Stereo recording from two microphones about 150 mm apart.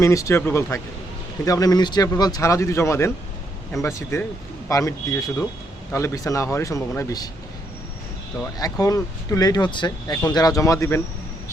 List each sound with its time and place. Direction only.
0.0 s a man's voice: 20° left (ahead or behind)
8.5 s a man's voice: 25° left (ahead or behind)